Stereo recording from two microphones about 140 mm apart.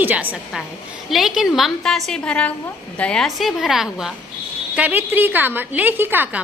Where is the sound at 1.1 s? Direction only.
Centre (ahead or behind).